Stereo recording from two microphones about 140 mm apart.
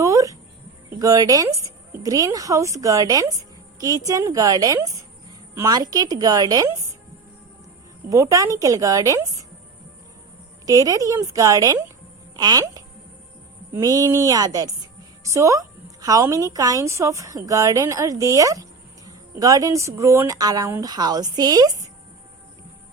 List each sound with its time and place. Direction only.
0.0 s music: 25° right (ahead or behind)
0.9 s a woman's voice: 25° right (ahead or behind)
8.1 s a woman's voice: 25° right (ahead or behind)
10.7 s a woman's voice: 25° right (ahead or behind)